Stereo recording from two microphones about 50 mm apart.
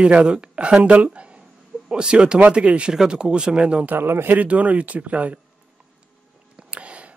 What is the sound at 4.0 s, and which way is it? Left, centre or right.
Speech, right.